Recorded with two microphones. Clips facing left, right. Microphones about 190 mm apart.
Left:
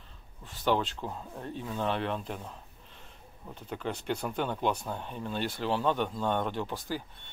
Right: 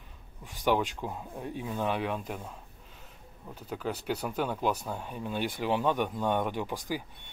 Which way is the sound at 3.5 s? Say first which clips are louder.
Right 1 dB; 5° right (ahead or behind).